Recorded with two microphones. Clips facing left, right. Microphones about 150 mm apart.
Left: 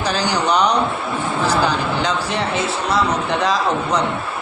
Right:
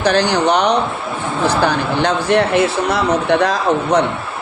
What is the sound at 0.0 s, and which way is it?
Speech, 60° right (ahead or behind).